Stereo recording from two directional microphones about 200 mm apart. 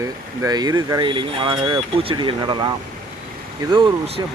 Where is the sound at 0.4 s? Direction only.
20° right (ahead or behind).